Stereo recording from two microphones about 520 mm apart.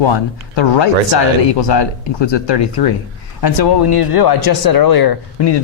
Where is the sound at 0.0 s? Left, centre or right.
Left.